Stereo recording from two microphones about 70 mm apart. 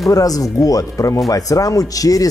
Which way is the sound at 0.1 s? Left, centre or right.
Left.